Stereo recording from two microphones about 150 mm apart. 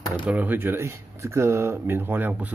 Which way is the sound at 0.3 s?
10° right (ahead or behind).